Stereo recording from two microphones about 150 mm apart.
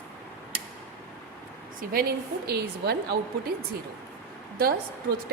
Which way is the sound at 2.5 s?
90° right.